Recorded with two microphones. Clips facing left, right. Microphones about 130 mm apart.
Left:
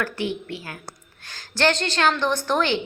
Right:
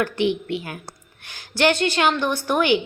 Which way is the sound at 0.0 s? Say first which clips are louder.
Right 5 dB; 20° right (ahead or behind).